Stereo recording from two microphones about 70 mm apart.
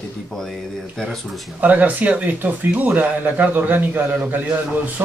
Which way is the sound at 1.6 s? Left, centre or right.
Right.